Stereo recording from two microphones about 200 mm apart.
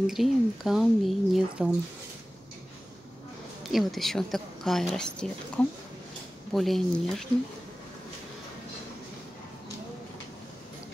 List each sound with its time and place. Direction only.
0.0 s a woman's voice: centre (ahead or behind)
3.6 s a woman's voice: centre (ahead or behind)